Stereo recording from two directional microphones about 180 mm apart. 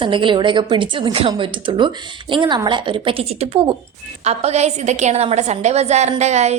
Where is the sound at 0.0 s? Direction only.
25° right (ahead or behind).